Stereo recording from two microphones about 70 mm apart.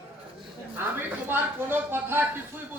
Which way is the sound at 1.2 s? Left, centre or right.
Right.